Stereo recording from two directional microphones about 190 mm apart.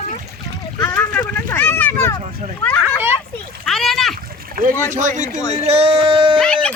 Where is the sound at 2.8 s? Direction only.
10° right (ahead or behind).